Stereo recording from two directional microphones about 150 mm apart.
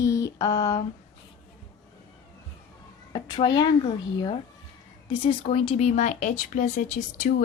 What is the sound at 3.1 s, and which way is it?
Speech, 30° left (ahead or behind).